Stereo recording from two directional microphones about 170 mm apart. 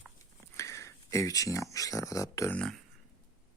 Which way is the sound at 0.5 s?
15° left (ahead or behind).